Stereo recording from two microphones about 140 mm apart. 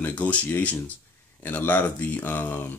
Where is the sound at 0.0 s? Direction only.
10° left (ahead or behind).